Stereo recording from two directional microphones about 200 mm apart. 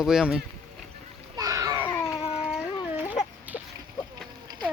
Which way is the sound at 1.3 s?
20° right (ahead or behind).